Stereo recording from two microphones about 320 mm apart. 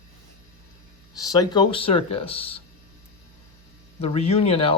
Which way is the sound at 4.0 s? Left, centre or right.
Centre.